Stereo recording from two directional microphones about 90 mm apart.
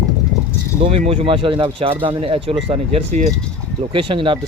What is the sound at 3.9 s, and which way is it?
Speech, 70° right (ahead or behind).